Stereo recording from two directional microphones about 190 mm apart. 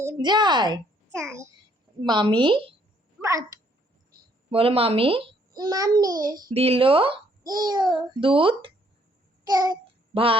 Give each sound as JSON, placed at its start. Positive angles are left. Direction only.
{"t": 0.0, "sound": "a child's voice", "side_deg": -20}
{"t": 3.2, "sound": "a sound", "side_deg": -15}
{"t": 4.4, "sound": "a child's voice", "side_deg": -30}
{"t": 9.4, "sound": "babbling", "side_deg": -20}
{"t": 10.1, "sound": "a child's voice", "side_deg": -30}